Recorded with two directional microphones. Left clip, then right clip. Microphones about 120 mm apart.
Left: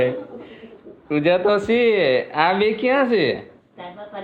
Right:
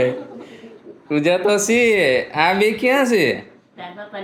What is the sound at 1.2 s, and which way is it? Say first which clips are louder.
Speech: even; 20° right (ahead or behind).